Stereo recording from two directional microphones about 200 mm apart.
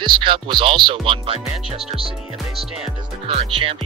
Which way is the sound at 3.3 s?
30° right (ahead or behind).